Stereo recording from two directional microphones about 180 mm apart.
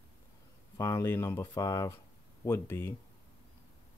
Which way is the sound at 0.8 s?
15° left (ahead or behind).